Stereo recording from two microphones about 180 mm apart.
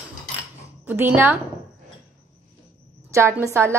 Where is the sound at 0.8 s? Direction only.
10° right (ahead or behind).